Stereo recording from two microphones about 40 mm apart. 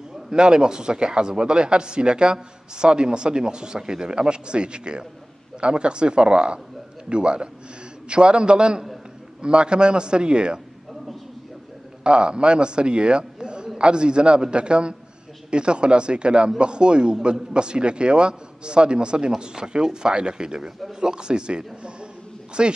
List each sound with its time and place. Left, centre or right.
0.3 s speech: centre
12.0 s a man's voice: right